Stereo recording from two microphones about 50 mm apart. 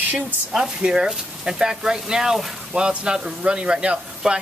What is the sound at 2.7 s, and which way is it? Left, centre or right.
Speech, centre.